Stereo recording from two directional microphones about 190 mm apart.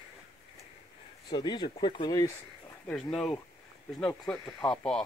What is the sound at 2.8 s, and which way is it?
Speech, 5° left (ahead or behind).